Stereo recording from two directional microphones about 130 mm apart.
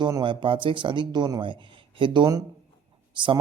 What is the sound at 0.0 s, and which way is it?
A man's voice, 35° right (ahead or behind).